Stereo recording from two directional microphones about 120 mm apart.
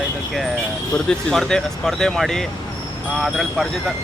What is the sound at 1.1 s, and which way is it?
Speech, 5° left (ahead or behind).